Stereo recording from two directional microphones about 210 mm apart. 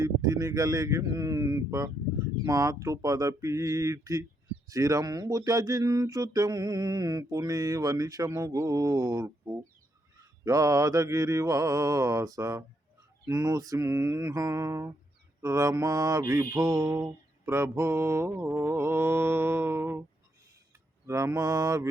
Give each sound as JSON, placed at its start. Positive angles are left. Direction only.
{"t": 0.0, "sound": "speech", "side_deg": -15}
{"t": 21.1, "sound": "speech", "side_deg": -15}